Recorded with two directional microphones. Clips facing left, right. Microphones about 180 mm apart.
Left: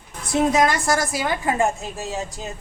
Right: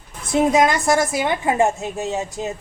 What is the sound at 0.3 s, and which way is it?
A woman's voice, 20° right (ahead or behind).